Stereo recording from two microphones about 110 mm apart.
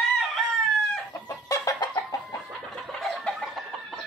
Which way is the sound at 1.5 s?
30° left (ahead or behind).